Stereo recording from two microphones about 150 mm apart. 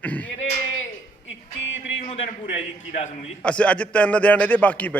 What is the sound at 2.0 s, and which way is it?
A man's voice, 45° left (ahead or behind).